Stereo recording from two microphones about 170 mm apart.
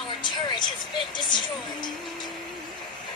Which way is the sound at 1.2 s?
25° left (ahead or behind).